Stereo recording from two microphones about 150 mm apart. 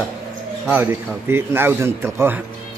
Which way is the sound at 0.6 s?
15° right (ahead or behind).